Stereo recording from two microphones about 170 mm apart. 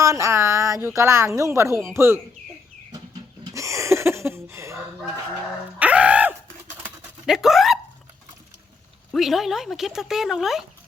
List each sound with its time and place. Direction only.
0.0 s speech: 20° right (ahead or behind)
3.5 s a sound: 20° right (ahead or behind); by 7.8 s centre (ahead or behind)
9.1 s speech: centre (ahead or behind)